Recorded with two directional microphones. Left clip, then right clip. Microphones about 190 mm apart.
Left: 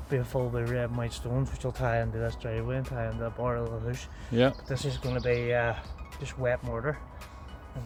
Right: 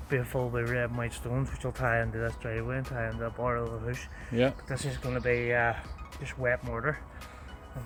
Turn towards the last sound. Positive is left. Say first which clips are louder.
# right 1 dB
turn(degrees=5)  # may be behind; listen again after turning